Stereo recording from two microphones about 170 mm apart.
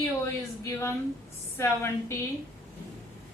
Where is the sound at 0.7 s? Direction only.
15° left (ahead or behind).